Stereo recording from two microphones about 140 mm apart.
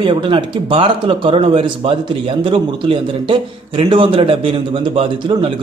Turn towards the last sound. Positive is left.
turn(degrees=-40)  # may be behind; listen again after turning